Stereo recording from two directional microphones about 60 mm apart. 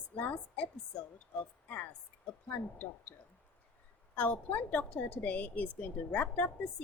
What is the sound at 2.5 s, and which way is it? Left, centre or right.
Speech, left.